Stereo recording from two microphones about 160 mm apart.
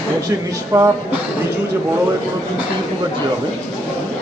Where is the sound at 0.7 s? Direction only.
20° right (ahead or behind).